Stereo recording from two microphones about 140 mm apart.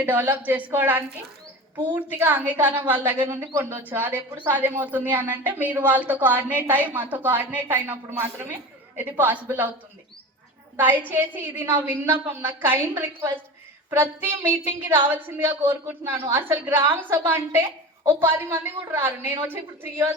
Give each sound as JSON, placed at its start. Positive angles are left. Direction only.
{"t": 0.0, "sound": "a woman's voice", "side_deg": -10}
{"t": 10.8, "sound": "a woman's voice", "side_deg": -15}